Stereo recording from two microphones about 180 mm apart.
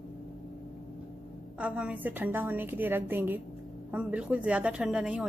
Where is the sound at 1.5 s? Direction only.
5° right (ahead or behind).